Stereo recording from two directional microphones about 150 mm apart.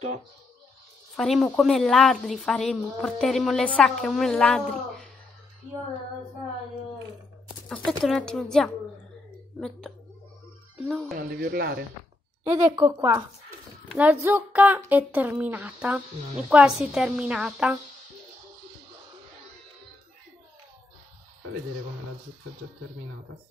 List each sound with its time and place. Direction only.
1.1 s a woman's voice: centre (ahead or behind)
7.6 s a woman's voice: 5° left (ahead or behind)
11.1 s speech: 85° right
12.4 s a woman's voice: 10° right (ahead or behind)